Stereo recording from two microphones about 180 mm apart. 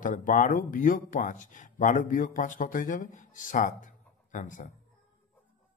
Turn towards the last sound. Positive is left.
turn(degrees=45)  # may be behind; listen again after turning